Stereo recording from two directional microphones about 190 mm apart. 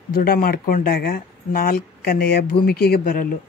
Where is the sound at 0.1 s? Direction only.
50° left (ahead or behind).